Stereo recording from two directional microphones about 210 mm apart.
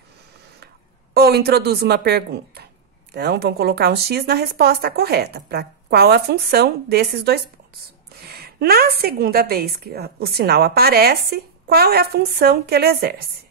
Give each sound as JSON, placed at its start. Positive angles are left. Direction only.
{"t": 1.1, "sound": "speech", "side_deg": -45}